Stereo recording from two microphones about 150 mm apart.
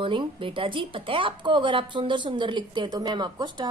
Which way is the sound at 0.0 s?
35° right (ahead or behind).